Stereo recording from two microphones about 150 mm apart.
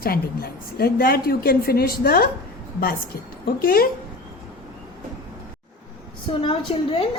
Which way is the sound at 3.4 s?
80° left.